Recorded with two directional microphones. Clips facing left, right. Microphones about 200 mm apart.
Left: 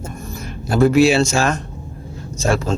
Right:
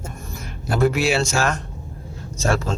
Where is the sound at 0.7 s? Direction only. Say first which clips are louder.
Left 6 dB; 30° left (ahead or behind).